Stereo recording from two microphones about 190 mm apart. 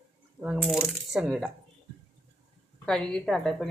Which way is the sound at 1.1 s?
5° right (ahead or behind).